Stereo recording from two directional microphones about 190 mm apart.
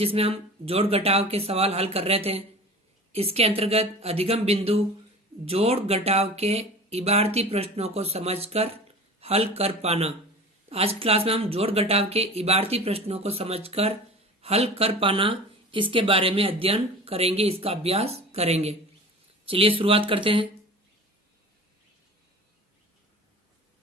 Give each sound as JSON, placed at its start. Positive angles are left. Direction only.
{"t": 0.0, "sound": "speech", "side_deg": -30}